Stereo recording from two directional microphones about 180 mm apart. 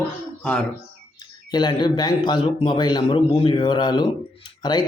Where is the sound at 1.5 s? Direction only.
25° left (ahead or behind).